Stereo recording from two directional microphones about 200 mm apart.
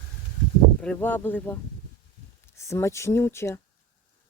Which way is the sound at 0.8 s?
5° left (ahead or behind).